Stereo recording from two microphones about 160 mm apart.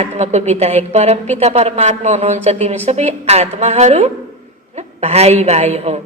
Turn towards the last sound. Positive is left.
turn(degrees=-40)  # may be behind; listen again after turning